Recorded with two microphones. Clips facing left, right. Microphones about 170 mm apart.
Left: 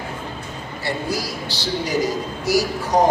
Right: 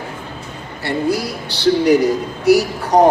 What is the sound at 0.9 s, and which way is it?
Speech, 60° right (ahead or behind).